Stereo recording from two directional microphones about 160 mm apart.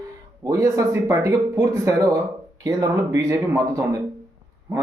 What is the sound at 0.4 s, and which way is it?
Speech, 20° right (ahead or behind).